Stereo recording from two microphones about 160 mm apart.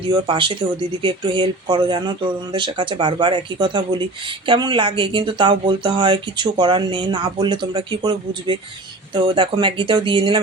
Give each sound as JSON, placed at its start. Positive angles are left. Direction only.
{"t": 0.1, "sound": "speech", "side_deg": -30}